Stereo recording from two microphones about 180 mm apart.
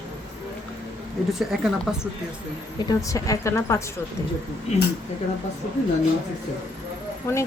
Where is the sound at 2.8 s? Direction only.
20° left (ahead or behind).